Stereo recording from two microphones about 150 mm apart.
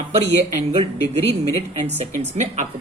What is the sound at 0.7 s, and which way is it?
Speech, 40° right (ahead or behind).